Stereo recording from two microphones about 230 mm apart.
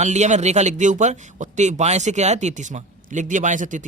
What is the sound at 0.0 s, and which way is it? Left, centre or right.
Speech, right.